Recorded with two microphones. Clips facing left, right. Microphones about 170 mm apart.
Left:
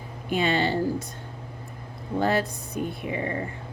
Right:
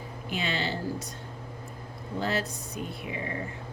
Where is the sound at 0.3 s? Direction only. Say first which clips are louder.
Left 8 dB; 50° left (ahead or behind).